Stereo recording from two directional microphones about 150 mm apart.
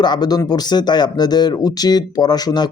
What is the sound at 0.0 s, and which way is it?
Speech, 30° left (ahead or behind).